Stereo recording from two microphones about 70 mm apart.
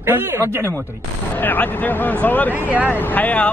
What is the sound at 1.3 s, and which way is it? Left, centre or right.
Speech, left.